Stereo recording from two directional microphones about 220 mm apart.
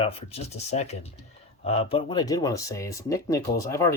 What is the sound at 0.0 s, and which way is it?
Speech, 25° left (ahead or behind).